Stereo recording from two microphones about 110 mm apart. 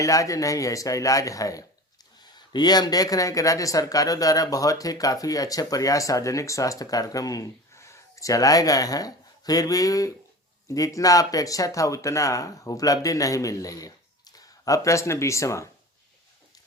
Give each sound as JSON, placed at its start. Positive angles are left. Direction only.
{"t": 0.0, "sound": "speech", "side_deg": 30}